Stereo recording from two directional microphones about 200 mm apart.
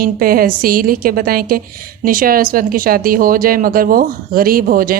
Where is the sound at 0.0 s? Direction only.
45° right (ahead or behind).